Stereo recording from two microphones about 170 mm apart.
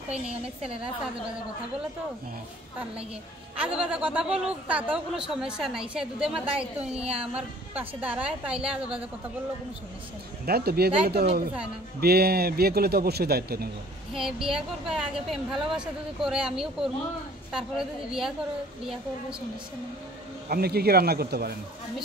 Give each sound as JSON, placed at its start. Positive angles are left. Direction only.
{"t": 3.5, "sound": "a woman's voice", "side_deg": -5}
{"t": 10.4, "sound": "a man's voice", "side_deg": -65}
{"t": 14.1, "sound": "a woman's voice", "side_deg": 0}
{"t": 20.4, "sound": "speech", "side_deg": -65}